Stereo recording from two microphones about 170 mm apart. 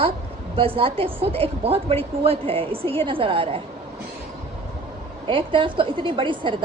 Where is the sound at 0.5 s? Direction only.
35° right (ahead or behind).